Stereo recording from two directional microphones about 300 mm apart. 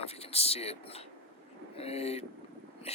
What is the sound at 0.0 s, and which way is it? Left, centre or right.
Speech, centre.